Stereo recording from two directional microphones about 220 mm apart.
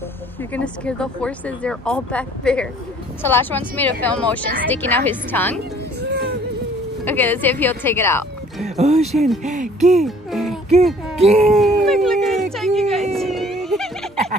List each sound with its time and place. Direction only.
0.5 s a woman's voice: 5° left (ahead or behind)
5.9 s a sound: 50° right (ahead or behind)
7.1 s a woman's voice: 10° left (ahead or behind)
8.6 s music: 30° right (ahead or behind)
9.1 s speech: centre (ahead or behind)
9.4 s music: 35° right (ahead or behind)
10.0 s music: centre (ahead or behind)
11.1 s a sound: 30° right (ahead or behind)
11.8 s dog: centre (ahead or behind)